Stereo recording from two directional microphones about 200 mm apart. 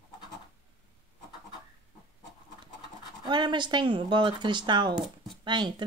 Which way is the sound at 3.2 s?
25° right (ahead or behind).